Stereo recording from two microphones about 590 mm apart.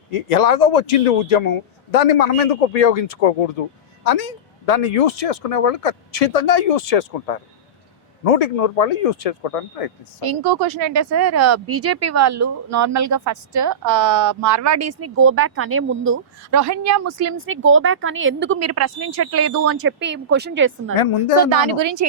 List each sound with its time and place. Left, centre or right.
0.1 s speech: left
10.2 s speech: right; by 20.9 s centre
20.9 s speech: left
21.4 s speech: right